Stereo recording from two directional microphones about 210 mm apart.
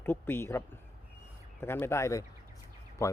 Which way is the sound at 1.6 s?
10° left (ahead or behind).